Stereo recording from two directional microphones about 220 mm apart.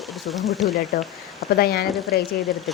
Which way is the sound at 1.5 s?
45° left (ahead or behind).